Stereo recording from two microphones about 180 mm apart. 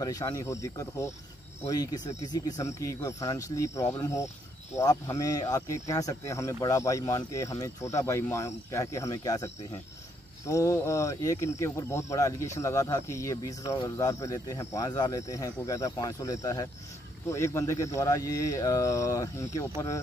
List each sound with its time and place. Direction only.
0.0 s speech: 20° left (ahead or behind)